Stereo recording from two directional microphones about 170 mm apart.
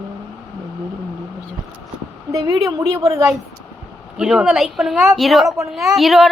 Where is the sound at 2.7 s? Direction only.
20° right (ahead or behind).